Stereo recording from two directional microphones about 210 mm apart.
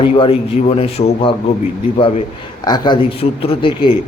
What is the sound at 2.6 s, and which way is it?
A man's voice, 20° left (ahead or behind).